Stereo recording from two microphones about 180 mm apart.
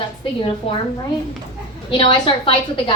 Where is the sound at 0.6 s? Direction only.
30° left (ahead or behind).